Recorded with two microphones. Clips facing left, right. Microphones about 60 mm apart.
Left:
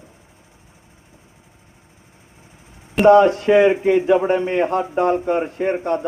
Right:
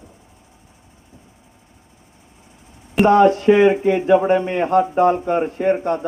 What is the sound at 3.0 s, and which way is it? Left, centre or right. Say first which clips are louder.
Speech: left 2 dB; right.